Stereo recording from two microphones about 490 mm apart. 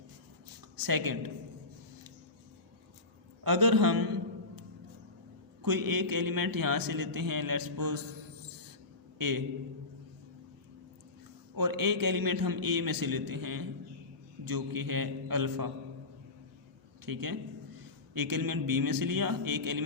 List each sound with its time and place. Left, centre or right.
0.8 s speech: right
3.4 s a man's voice: right
5.6 s a man's voice: right
9.1 s a man's voice: right
11.5 s a man's voice: right
17.1 s a man's voice: right